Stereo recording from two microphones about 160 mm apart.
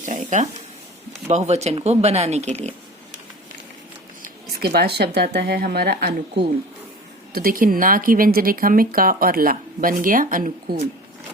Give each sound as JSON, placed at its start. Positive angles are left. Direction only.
{"t": 0.0, "sound": "a sound", "side_deg": -55}
{"t": 1.3, "sound": "speech", "side_deg": -45}
{"t": 4.2, "sound": "speech", "side_deg": -70}
{"t": 7.3, "sound": "speech", "side_deg": -65}